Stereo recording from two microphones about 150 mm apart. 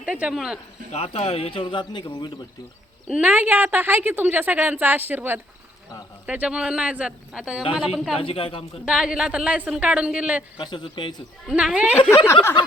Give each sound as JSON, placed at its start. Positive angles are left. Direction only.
{"t": 0.0, "sound": "a woman's voice", "side_deg": -10}
{"t": 0.9, "sound": "speech", "side_deg": 45}
{"t": 3.1, "sound": "a woman's voice", "side_deg": -10}
{"t": 8.1, "sound": "speech", "side_deg": 35}
{"t": 8.8, "sound": "speech", "side_deg": -5}
{"t": 10.6, "sound": "speech", "side_deg": 30}
{"t": 11.4, "sound": "a woman's voice", "side_deg": -5}
{"t": 12.1, "sound": "speech", "side_deg": 20}